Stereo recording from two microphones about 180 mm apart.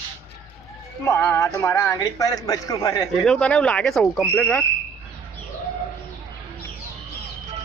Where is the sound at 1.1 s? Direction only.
15° left (ahead or behind).